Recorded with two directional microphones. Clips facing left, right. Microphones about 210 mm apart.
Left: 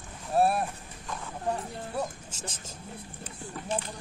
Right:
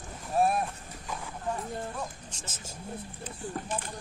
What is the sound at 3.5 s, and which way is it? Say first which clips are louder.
Speech: left 2 dB; 50° right (ahead or behind).